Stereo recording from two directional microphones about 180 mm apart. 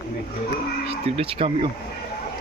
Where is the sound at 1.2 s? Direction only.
30° right (ahead or behind).